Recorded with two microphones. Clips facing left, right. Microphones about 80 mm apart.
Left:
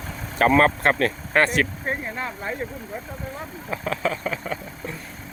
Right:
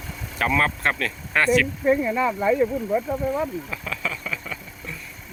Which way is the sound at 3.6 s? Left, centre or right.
Left.